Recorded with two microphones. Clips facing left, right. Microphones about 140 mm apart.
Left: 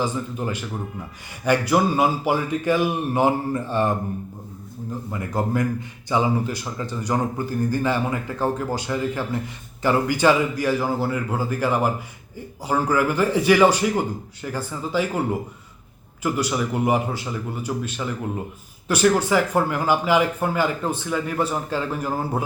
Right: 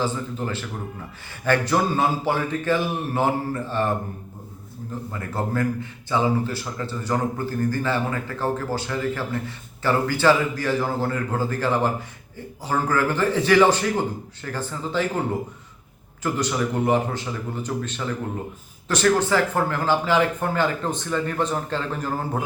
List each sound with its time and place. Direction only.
0.0 s speech: 15° left (ahead or behind)
5.4 s speech: 15° left (ahead or behind)